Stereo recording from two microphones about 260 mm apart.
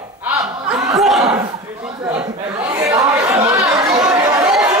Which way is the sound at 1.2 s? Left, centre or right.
Centre.